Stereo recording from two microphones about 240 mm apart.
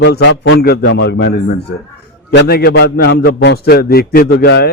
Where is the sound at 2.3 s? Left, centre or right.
Left.